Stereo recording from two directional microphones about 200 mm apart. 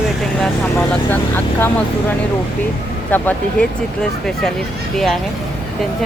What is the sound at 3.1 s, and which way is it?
Speech, 10° left (ahead or behind).